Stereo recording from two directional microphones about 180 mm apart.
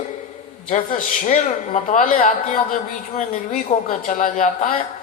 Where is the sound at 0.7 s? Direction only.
45° left (ahead or behind).